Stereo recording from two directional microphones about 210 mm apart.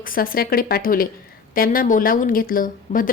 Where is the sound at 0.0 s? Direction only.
40° left (ahead or behind).